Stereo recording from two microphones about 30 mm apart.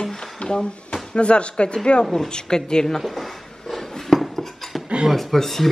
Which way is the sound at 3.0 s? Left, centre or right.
Centre.